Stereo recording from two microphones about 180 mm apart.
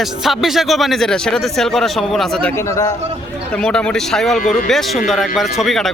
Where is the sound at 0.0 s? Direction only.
Centre (ahead or behind).